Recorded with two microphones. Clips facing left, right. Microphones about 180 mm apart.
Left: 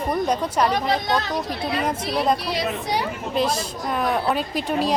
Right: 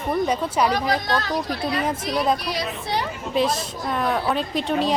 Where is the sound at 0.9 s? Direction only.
20° left (ahead or behind).